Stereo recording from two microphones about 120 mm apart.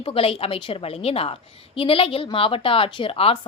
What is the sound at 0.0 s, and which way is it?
A woman's voice, 50° left (ahead or behind).